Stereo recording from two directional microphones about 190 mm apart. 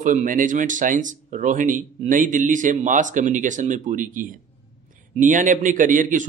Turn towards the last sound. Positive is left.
turn(degrees=-45)  # may be behind; listen again after turning